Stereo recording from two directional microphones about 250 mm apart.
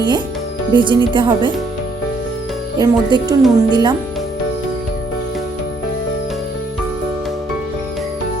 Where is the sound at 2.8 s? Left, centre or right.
Centre.